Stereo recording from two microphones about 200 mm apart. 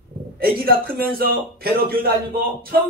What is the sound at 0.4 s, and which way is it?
A man's voice, 50° right (ahead or behind).